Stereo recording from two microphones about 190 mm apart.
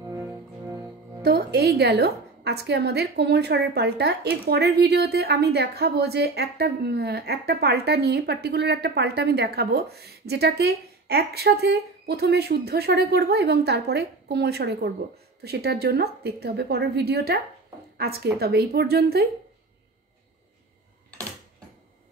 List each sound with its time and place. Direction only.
1.2 s a woman's voice: 55° right (ahead or behind)